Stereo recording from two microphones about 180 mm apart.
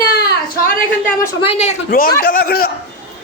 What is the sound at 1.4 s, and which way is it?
Speech, 35° left (ahead or behind).